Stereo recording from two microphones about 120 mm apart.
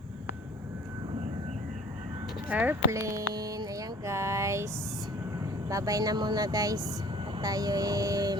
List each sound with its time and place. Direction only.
2.5 s speech: 15° right (ahead or behind)
2.9 s a sound: 25° right (ahead or behind)
5.4 s speech: 30° right (ahead or behind)
7.4 s music: 30° right (ahead or behind)